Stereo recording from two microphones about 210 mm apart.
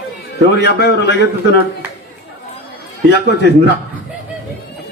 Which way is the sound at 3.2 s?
55° right (ahead or behind).